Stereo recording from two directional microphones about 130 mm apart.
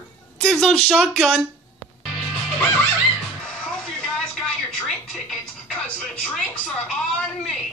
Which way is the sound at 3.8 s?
5° left (ahead or behind).